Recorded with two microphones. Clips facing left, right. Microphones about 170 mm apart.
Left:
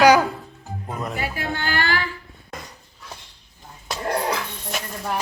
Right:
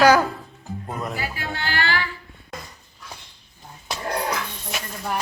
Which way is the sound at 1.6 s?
45° left (ahead or behind).